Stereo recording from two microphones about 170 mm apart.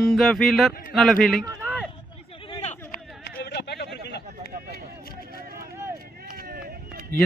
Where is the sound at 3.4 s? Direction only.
75° left (ahead or behind).